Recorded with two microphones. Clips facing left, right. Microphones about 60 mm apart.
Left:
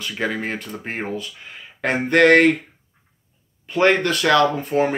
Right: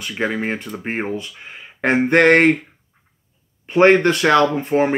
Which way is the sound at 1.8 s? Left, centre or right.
Right.